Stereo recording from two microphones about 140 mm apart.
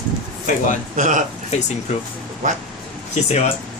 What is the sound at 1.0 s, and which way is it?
Speech, 60° right (ahead or behind).